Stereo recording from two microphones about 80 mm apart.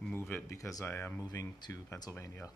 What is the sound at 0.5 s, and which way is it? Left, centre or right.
Speech, left.